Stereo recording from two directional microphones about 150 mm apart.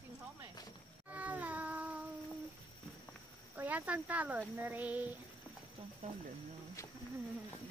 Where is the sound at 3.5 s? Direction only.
10° right (ahead or behind).